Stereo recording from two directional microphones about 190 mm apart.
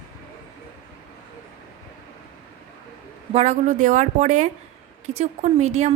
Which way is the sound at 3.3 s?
35° right (ahead or behind).